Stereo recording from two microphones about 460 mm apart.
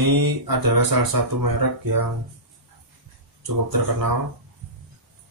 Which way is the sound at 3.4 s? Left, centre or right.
Right.